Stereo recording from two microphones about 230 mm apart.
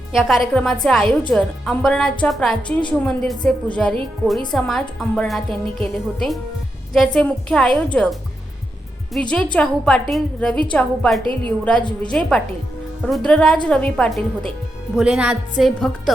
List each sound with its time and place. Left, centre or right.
0.1 s a woman's voice: centre
9.3 s a woman's voice: centre
11.8 s a woman's voice: centre
13.1 s a woman's voice: centre